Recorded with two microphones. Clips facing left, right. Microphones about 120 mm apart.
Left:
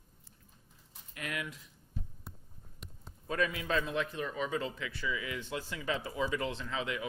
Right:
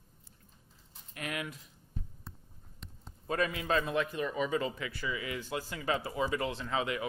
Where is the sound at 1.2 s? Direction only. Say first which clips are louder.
Right 1 dB; 50° right (ahead or behind).